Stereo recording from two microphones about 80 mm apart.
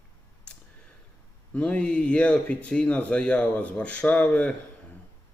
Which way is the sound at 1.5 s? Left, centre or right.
Centre.